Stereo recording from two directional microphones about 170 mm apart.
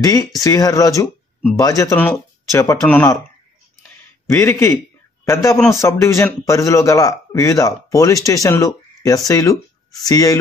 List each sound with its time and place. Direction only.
0.0 s a man's voice: 20° left (ahead or behind)
4.3 s a man's voice: 15° left (ahead or behind)